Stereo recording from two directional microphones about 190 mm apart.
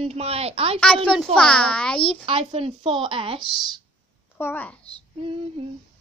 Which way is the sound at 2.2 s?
30° right (ahead or behind).